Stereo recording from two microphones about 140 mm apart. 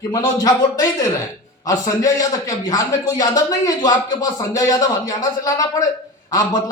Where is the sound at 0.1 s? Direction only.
25° left (ahead or behind).